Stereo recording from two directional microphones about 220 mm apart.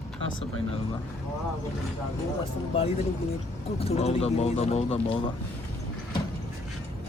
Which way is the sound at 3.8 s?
30° left (ahead or behind).